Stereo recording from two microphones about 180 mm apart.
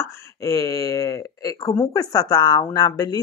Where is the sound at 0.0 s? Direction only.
15° left (ahead or behind).